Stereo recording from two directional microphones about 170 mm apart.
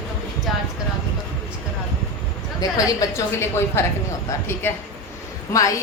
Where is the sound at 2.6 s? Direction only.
20° left (ahead or behind).